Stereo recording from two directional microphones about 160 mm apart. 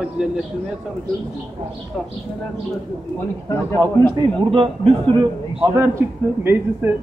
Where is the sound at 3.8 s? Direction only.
25° right (ahead or behind).